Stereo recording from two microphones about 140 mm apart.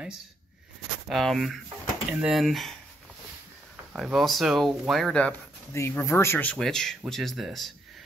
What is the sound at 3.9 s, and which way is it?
Speech, centre (ahead or behind).